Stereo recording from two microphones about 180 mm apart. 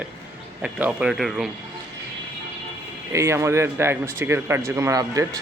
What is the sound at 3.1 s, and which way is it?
Speech, 15° right (ahead or behind).